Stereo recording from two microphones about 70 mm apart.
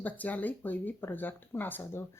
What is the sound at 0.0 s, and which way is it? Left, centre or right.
A woman's voice, left.